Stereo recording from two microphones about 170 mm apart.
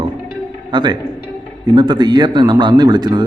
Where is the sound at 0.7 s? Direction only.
25° right (ahead or behind).